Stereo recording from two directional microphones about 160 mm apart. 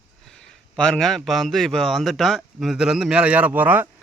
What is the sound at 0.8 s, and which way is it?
Speech, 5° left (ahead or behind).